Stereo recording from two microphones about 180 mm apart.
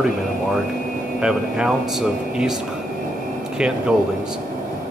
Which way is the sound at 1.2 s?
5° right (ahead or behind).